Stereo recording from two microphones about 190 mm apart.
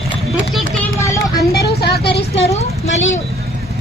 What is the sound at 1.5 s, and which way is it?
Vehicle, 55° left (ahead or behind).